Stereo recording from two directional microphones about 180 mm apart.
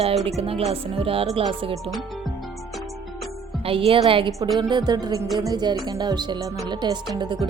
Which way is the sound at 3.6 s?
30° right (ahead or behind).